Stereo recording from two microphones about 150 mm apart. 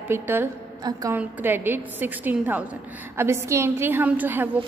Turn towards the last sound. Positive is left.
turn(degrees=-10)  # may be behind; listen again after turning